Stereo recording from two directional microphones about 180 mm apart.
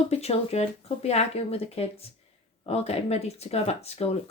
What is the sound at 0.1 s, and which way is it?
Speech, 35° left (ahead or behind).